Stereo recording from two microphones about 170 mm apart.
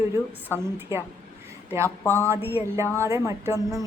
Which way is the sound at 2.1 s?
15° right (ahead or behind).